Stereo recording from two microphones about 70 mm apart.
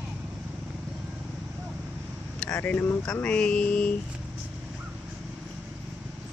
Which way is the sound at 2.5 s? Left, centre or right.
Left.